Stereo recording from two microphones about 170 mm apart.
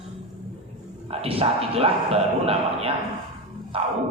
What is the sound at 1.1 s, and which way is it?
A man's voice, 35° right (ahead or behind).